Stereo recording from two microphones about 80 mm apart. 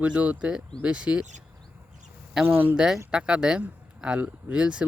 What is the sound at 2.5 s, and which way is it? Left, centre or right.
Speech, right.